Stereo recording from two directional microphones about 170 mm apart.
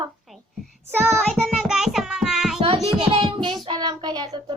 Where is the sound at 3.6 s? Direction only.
25° right (ahead or behind).